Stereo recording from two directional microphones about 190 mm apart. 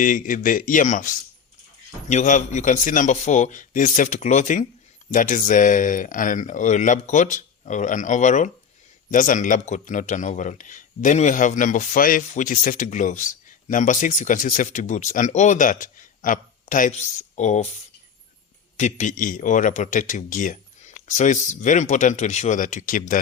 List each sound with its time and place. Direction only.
0.0 s a man's voice: 45° left (ahead or behind)
18.8 s a man's voice: 40° left (ahead or behind)